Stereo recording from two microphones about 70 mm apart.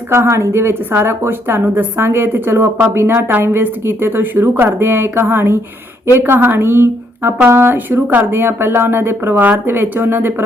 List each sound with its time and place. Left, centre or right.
0.1 s a woman's voice: right
9.3 s a woman's voice: right